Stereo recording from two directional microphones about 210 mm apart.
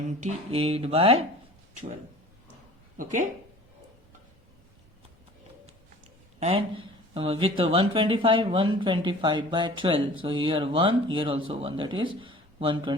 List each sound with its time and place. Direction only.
0.2 s speech: 30° right (ahead or behind)
3.0 s speech: 35° right (ahead or behind)
7.1 s speech: 25° right (ahead or behind)